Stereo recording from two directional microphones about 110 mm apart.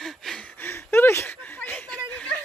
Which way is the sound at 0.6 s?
20° left (ahead or behind).